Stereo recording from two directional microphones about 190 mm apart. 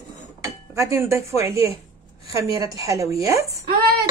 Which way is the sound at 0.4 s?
15° right (ahead or behind).